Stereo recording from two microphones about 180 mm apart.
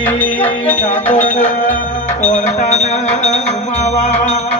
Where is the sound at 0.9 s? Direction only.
40° left (ahead or behind).